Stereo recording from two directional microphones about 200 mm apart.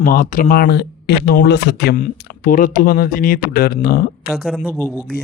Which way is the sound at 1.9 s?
45° left (ahead or behind).